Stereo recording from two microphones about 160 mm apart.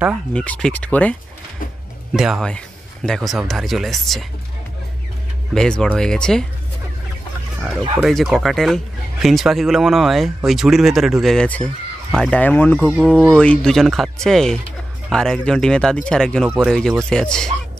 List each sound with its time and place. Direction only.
0.3 s speech: 5° left (ahead or behind)
2.1 s speech: centre (ahead or behind)
5.5 s speech: 5° left (ahead or behind)
8.0 s speech: centre (ahead or behind)